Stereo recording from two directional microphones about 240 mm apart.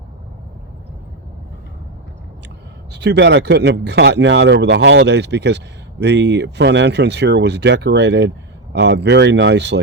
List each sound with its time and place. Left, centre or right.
2.9 s speech: right